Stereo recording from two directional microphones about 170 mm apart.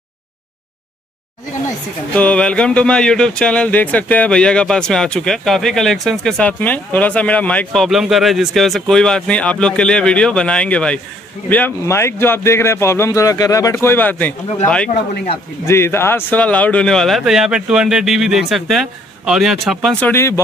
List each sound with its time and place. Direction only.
2.1 s a man's voice: 5° left (ahead or behind)
15.6 s speech: 15° left (ahead or behind)